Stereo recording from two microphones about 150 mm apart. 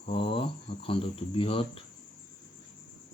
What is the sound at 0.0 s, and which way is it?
Cricket, 40° left (ahead or behind).